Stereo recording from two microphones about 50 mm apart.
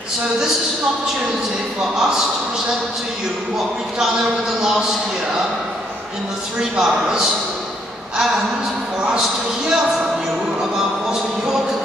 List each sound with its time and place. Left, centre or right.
1.8 s a man's voice: centre
6.8 s a man's voice: centre
11.1 s music: centre